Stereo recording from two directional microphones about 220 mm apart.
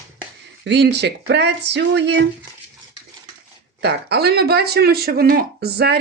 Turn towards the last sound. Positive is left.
turn(degrees=-45)  # may be behind; listen again after turning